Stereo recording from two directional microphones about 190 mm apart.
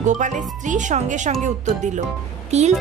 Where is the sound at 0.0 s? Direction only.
40° right (ahead or behind).